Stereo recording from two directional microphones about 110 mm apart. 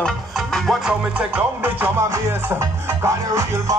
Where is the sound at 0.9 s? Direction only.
15° right (ahead or behind).